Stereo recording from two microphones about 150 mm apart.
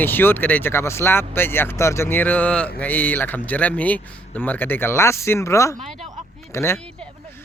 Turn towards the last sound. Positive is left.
turn(degrees=15)  # may be behind; listen again after turning